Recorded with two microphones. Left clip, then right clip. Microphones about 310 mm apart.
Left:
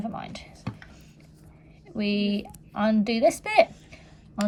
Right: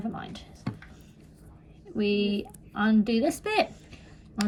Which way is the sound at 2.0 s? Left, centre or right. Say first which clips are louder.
Right 1 dB; centre.